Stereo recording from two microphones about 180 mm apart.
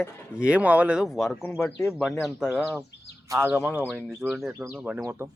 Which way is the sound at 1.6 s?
15° left (ahead or behind).